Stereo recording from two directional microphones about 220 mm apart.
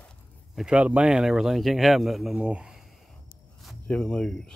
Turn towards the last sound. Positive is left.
turn(degrees=5)  # may be behind; listen again after turning